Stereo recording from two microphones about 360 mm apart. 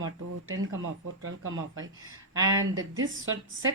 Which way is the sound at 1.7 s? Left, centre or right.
Right.